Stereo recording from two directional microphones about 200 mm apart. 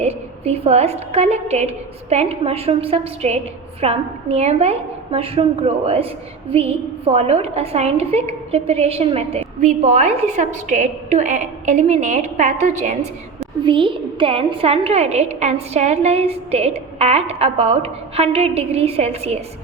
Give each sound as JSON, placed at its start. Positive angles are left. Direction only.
{"t": 0.0, "sound": "a woman's voice", "side_deg": -30}